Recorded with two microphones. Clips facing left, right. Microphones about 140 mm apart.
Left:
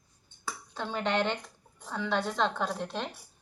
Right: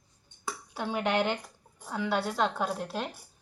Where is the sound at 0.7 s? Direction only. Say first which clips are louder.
Right 1 dB; 10° right (ahead or behind).